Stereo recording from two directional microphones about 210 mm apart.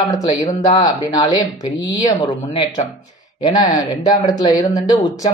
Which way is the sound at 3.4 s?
20° left (ahead or behind).